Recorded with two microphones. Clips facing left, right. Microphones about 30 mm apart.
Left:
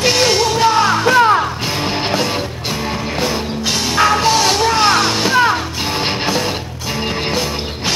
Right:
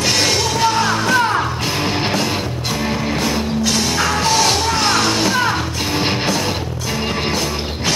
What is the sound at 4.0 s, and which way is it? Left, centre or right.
Music, centre.